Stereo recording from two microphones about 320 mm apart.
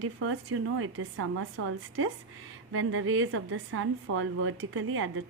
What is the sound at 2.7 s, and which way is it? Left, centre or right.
A woman's voice, right.